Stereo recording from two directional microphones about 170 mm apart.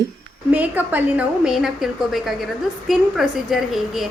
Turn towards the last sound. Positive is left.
turn(degrees=0)  # may be behind; listen again after turning